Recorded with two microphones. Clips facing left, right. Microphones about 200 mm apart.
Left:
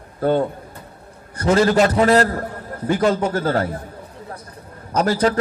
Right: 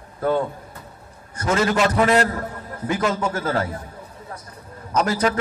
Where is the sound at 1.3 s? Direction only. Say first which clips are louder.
Left 5 dB; 35° left (ahead or behind).